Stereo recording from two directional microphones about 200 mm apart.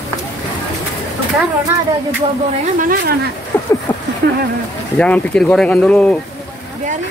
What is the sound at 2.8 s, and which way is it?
Speech, 45° right (ahead or behind).